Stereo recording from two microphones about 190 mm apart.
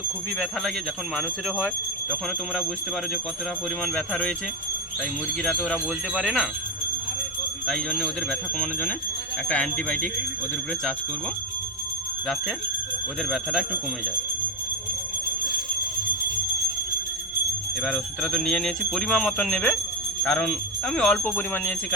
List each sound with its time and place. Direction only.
1.1 s jingle bell: centre (ahead or behind)
3.8 s jingle bell: 5° left (ahead or behind)
5.4 s jingle bell: 5° left (ahead or behind)
7.7 s jingle bell: 5° left (ahead or behind)
9.5 s speech: 5° left (ahead or behind)
13.2 s jingle bell: centre (ahead or behind)
17.8 s jingle bell: centre (ahead or behind)